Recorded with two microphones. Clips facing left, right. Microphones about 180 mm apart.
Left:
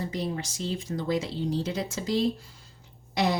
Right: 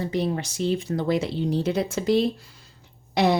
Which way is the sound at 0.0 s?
65° right (ahead or behind).